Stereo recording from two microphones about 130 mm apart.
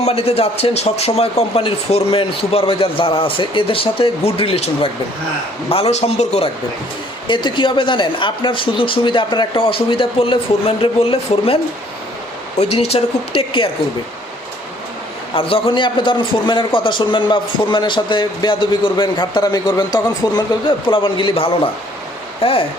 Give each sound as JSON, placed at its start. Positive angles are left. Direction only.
{"t": 0.0, "sound": "speech", "side_deg": 55}
{"t": 7.3, "sound": "a man's voice", "side_deg": 40}
{"t": 15.4, "sound": "a man's voice", "side_deg": 45}